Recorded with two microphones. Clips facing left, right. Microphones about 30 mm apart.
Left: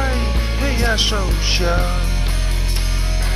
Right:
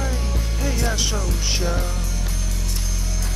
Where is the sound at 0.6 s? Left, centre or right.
Left.